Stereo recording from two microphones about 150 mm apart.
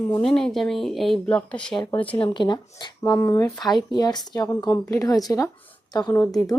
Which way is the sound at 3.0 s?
15° left (ahead or behind).